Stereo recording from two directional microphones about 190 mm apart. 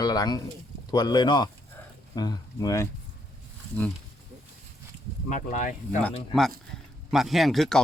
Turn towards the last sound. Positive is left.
turn(degrees=0)  # may be behind; listen again after turning